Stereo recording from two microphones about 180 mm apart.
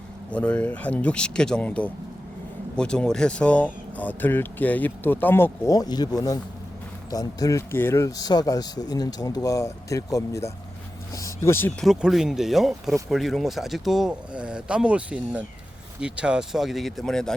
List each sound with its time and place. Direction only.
0.3 s speech: 5° left (ahead or behind)
11.9 s speech: centre (ahead or behind)